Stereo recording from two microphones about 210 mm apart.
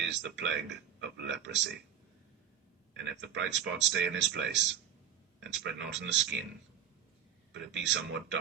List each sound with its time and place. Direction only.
0.0 s speech: 60° right (ahead or behind)
2.9 s speech: 60° right (ahead or behind)
5.8 s speech: 60° right (ahead or behind)
7.5 s speech: 60° right (ahead or behind)